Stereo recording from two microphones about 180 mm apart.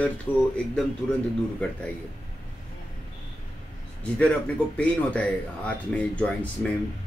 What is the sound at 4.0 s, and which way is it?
A man's voice, 5° left (ahead or behind).